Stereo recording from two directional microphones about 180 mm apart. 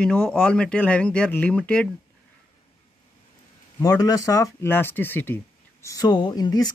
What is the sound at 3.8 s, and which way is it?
Speech, 20° left (ahead or behind).